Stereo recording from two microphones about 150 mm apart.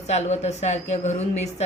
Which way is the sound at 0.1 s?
50° left (ahead or behind).